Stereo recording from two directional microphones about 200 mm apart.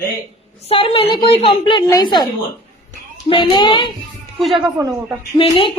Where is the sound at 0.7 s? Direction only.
25° left (ahead or behind).